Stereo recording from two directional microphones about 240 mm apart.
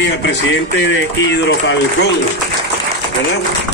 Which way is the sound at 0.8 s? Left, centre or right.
Left.